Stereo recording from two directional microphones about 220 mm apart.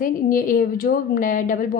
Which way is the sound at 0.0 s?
40° left (ahead or behind).